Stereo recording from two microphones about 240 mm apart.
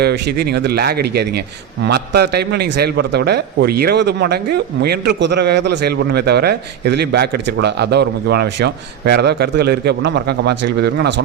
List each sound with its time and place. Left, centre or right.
0.0 s a man's voice: right